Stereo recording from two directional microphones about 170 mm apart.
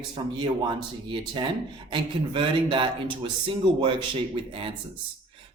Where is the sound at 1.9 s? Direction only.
30° right (ahead or behind).